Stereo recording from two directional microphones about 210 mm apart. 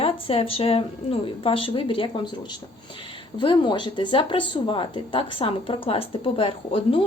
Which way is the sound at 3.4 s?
25° left (ahead or behind).